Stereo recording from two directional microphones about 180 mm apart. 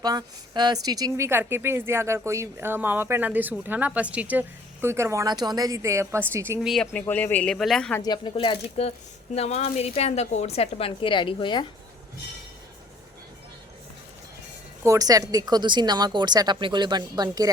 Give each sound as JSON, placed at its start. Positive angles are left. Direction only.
{"t": 0.0, "sound": "a woman's voice", "side_deg": -20}
{"t": 8.0, "sound": "a woman's voice", "side_deg": 25}
{"t": 14.8, "sound": "speech", "side_deg": -20}